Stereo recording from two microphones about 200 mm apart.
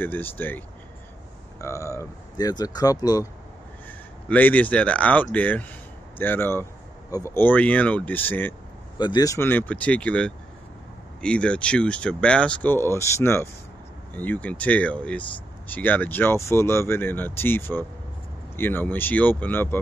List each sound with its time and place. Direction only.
0.0 s speech: 10° left (ahead or behind)
4.3 s speech: 10° left (ahead or behind)
8.9 s speech: 20° left (ahead or behind)